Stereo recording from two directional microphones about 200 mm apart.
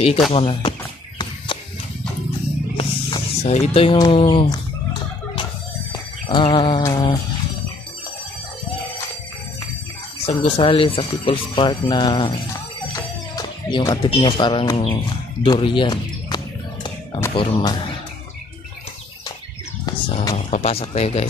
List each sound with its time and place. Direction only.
0.3 s speech: 30° left (ahead or behind)
0.6 s a sound: 20° left (ahead or behind)
2.8 s music: 30° left (ahead or behind)
4.0 s speech: 25° left (ahead or behind)
6.2 s speech: 25° left (ahead or behind)
10.2 s speech: 30° left (ahead or behind)
19.9 s a sound: 25° left (ahead or behind)